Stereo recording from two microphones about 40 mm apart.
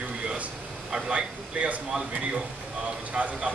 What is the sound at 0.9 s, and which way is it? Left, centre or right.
Speech, centre.